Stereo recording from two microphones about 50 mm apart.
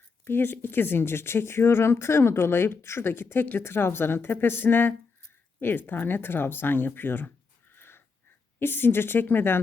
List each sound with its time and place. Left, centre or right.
0.3 s speech: left
3.6 s speech: left
7.8 s wheeze: left
8.5 s speech: left